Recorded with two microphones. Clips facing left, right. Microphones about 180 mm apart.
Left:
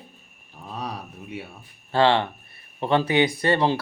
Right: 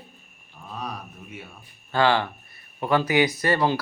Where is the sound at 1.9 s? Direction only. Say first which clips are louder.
Left 2 dB; 30° left (ahead or behind).